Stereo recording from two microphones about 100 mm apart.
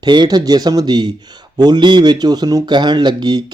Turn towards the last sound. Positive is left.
turn(degrees=-45)  # may be behind; listen again after turning